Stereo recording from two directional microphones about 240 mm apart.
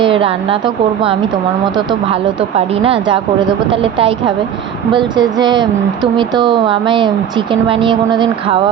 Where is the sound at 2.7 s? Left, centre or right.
Right.